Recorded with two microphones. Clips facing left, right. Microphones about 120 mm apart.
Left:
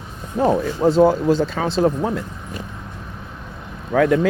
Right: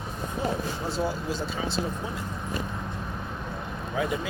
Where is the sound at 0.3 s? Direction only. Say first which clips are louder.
Left 12 dB; 90° left.